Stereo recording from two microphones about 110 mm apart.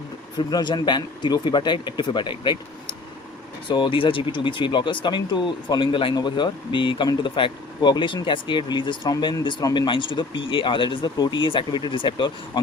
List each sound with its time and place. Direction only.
0.3 s speech: 40° left (ahead or behind)